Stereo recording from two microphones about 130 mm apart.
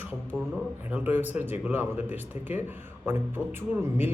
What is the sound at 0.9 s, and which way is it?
A man's voice, 15° right (ahead or behind).